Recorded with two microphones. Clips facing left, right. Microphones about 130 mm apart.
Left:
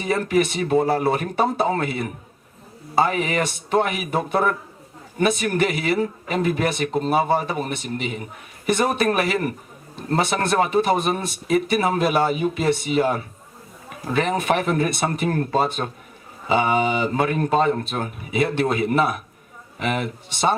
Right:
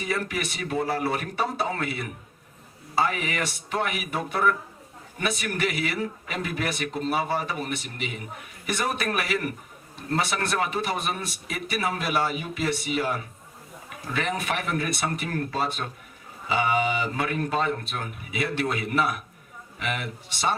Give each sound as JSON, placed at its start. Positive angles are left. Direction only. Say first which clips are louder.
{"t": 0.0, "sound": "speech", "louder": "left 9 dB", "side_deg": 30}